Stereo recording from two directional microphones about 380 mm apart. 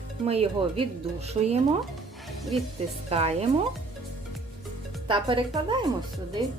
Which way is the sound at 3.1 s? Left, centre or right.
Centre.